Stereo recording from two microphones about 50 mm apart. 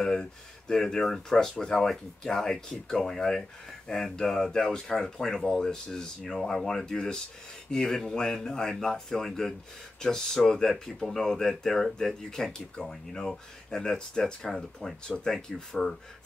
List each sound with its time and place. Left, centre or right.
0.0 s speech: centre